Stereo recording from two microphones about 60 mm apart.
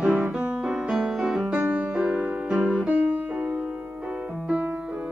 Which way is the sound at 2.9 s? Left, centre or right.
Right.